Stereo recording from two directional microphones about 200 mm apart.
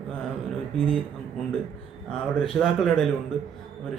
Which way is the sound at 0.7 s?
5° left (ahead or behind).